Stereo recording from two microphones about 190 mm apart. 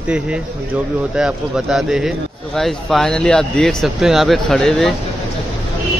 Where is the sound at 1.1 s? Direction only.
5° right (ahead or behind).